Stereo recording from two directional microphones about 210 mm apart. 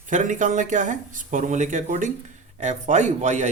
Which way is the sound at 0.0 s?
35° right (ahead or behind).